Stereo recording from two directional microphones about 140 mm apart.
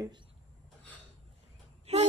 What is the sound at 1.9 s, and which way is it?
Speech, 50° right (ahead or behind).